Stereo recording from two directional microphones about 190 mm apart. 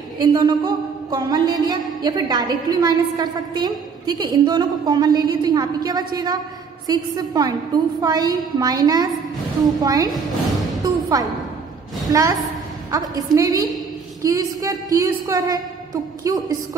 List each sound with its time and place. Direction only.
0.2 s speech: 25° right (ahead or behind)
10.8 s music: 20° right (ahead or behind)
12.1 s speech: 20° right (ahead or behind)